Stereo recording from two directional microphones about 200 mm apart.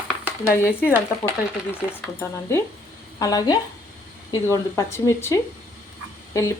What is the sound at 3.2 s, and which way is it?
A woman's voice, 20° left (ahead or behind).